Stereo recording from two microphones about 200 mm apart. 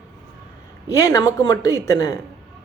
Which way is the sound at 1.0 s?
15° left (ahead or behind).